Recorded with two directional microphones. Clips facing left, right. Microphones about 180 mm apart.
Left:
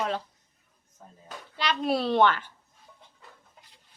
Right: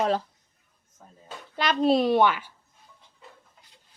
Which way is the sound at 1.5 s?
50° right (ahead or behind).